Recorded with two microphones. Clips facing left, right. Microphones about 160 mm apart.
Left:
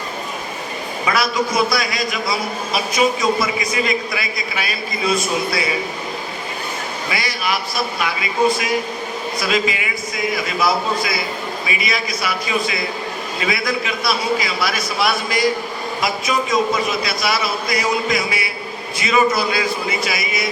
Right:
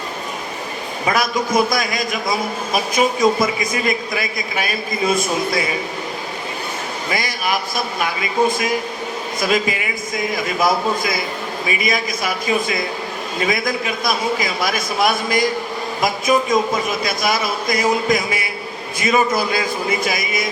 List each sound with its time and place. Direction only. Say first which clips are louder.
1.0 s a man's voice: even; 50° right (ahead or behind)
7.1 s a man's voice: right 1 dB; 45° right (ahead or behind)